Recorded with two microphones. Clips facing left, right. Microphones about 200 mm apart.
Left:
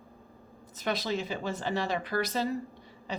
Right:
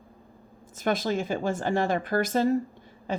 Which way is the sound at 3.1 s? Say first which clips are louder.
Right 6 dB; 50° right (ahead or behind).